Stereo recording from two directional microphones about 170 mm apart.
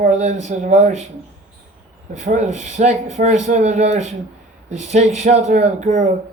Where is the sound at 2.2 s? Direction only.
45° right (ahead or behind).